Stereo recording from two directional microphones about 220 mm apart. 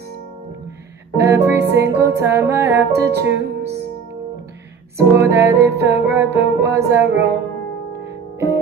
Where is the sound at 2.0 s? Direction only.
10° right (ahead or behind).